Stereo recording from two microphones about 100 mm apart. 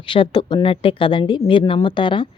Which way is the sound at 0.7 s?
65° left (ahead or behind).